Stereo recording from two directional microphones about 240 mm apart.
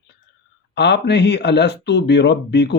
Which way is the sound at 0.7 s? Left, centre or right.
Left.